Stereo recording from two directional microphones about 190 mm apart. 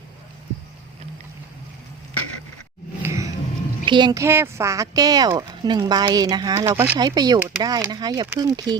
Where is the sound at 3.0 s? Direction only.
15° right (ahead or behind).